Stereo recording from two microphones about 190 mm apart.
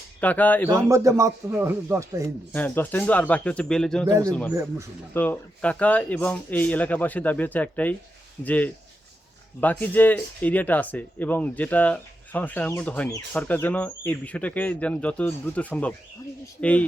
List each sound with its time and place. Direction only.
0.2 s speech: 10° left (ahead or behind)
0.9 s speech: 15° right (ahead or behind)
2.5 s speech: 10° left (ahead or behind)
4.0 s speech: 20° right (ahead or behind)
5.1 s speech: 10° left (ahead or behind)